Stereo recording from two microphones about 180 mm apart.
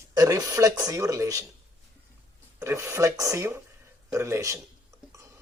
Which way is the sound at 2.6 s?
15° right (ahead or behind).